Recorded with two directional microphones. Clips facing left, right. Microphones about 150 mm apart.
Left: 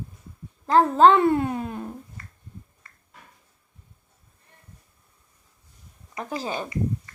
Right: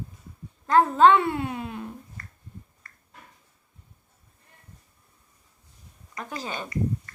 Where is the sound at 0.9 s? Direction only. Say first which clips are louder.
Left 4 dB; 40° left (ahead or behind).